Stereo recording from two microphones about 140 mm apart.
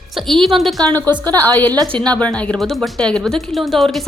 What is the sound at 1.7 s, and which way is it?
Speech, 30° right (ahead or behind).